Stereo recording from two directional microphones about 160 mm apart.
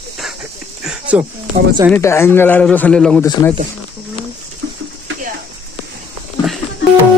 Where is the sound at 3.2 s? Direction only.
20° left (ahead or behind).